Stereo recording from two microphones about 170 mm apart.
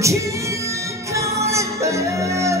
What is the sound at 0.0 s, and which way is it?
Music, 20° right (ahead or behind).